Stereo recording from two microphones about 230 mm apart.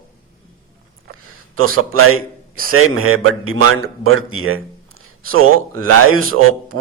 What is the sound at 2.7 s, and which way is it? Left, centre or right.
A man's voice, right.